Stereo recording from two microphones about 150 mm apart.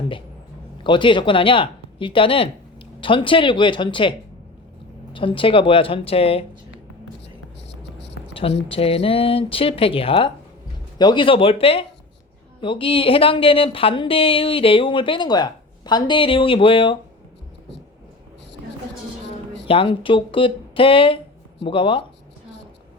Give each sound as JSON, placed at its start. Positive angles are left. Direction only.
{"t": 0.9, "sound": "speech", "side_deg": 30}
{"t": 5.1, "sound": "speech", "side_deg": 35}
{"t": 8.3, "sound": "speech", "side_deg": 40}
{"t": 19.6, "sound": "speech", "side_deg": 35}